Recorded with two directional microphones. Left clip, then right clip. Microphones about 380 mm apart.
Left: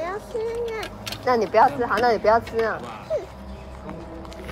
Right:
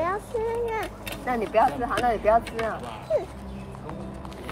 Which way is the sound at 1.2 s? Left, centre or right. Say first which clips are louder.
Left 5 dB; left.